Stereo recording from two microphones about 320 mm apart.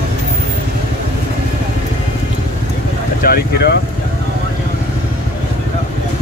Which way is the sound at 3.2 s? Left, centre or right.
Left.